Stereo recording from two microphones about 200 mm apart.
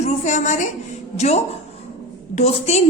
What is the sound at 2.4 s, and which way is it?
Speech, 30° left (ahead or behind).